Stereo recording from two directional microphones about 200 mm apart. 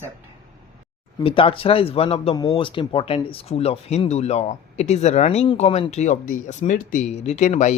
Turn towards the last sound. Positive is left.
turn(degrees=35)  # may be behind; listen again after turning